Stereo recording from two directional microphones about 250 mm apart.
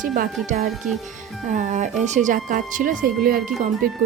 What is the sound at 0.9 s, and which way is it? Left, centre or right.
Speech, right.